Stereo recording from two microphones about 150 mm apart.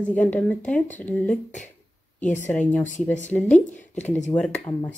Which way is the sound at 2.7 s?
10° left (ahead or behind).